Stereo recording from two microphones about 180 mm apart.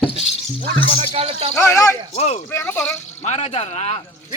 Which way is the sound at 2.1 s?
35° left (ahead or behind).